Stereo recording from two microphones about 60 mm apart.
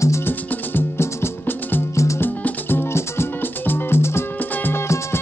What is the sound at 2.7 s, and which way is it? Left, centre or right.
Music, left.